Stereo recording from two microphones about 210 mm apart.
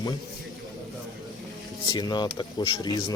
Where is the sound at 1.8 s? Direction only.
15° left (ahead or behind).